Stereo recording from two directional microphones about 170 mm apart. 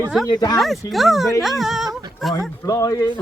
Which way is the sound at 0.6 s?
Centre (ahead or behind).